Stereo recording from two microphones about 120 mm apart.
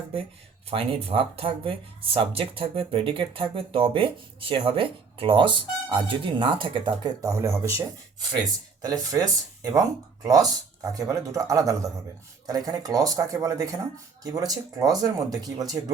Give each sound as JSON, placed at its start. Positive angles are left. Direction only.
{"t": 0.7, "sound": "speech", "side_deg": -50}
{"t": 7.2, "sound": "speech", "side_deg": -25}